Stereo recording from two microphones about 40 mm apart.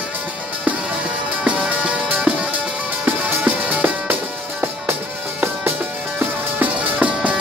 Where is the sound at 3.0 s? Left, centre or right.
Right.